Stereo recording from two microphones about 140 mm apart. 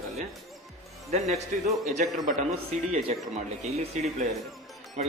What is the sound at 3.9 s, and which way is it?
Speech, 60° right (ahead or behind).